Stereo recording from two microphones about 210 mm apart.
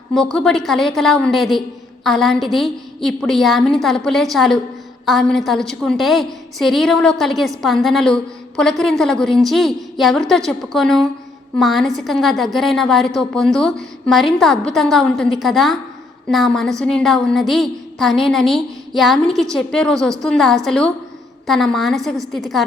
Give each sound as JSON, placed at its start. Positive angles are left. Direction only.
{"t": 0.1, "sound": "a woman's voice", "side_deg": 0}